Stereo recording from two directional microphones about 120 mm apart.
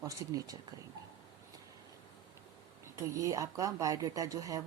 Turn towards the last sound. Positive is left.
turn(degrees=-25)  # may be behind; listen again after turning